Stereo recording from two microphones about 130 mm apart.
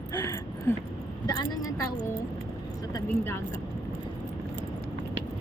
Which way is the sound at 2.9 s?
20° left (ahead or behind).